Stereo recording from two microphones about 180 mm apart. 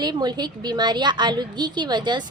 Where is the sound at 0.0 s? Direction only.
25° right (ahead or behind).